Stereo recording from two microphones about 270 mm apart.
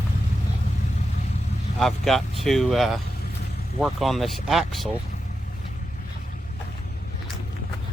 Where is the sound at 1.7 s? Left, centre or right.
Centre.